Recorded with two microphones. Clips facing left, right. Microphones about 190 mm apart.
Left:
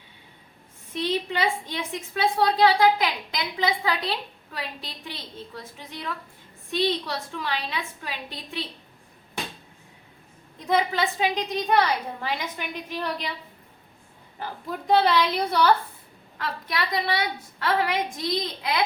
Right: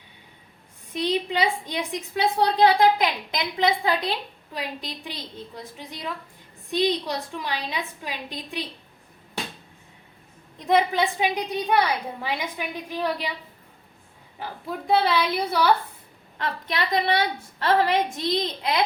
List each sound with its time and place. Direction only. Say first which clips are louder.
1.0 s a woman's voice: right 2 dB; 15° right (ahead or behind)
10.7 s a woman's voice: right 3 dB; 15° right (ahead or behind)
14.8 s a woman's voice: left 1 dB; 5° right (ahead or behind)
16.4 s a woman's voice: right 2 dB; 20° right (ahead or behind)